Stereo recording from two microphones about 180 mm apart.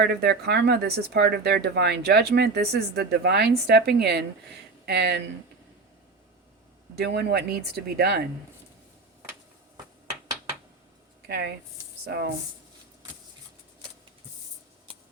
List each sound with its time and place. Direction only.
0.0 s speech: 65° right (ahead or behind)
6.9 s speech: 65° right (ahead or behind)
11.3 s speech: 70° right (ahead or behind)